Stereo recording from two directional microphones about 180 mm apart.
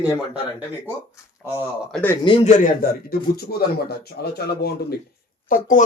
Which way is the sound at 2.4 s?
45° left (ahead or behind).